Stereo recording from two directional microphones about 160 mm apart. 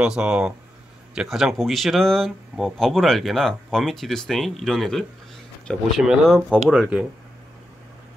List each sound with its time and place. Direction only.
0.0 s speech: 5° right (ahead or behind)